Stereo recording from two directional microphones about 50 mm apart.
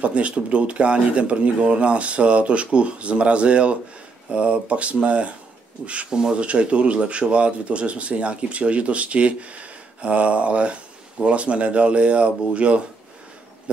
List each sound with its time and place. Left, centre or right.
0.0 s speech: right